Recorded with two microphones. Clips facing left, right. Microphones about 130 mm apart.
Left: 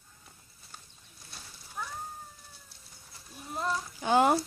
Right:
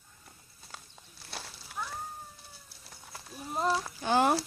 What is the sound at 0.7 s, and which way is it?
Walk, 90° right.